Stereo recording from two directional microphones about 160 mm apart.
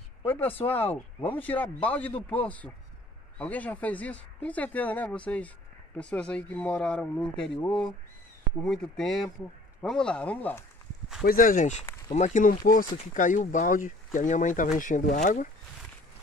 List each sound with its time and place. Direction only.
0.2 s speech: 10° left (ahead or behind)
8.6 s speech: 5° left (ahead or behind)
11.2 s speech: 60° left (ahead or behind)